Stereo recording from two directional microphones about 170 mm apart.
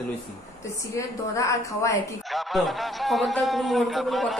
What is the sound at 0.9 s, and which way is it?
A woman's voice, 20° left (ahead or behind).